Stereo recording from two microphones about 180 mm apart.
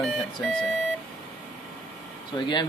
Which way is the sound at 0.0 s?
5° left (ahead or behind).